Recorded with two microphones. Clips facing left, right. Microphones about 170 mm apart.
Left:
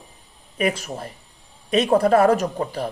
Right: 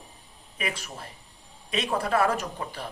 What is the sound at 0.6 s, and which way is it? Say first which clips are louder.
Speech: left 10 dB; 45° left (ahead or behind).